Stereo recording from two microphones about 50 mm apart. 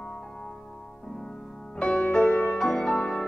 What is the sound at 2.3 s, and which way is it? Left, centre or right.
Music, left.